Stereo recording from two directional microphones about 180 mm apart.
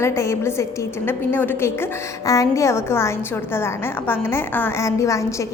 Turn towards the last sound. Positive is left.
turn(degrees=15)  # may be behind; listen again after turning